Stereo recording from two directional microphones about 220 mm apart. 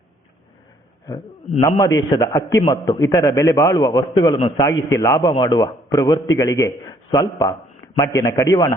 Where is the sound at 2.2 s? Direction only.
10° left (ahead or behind).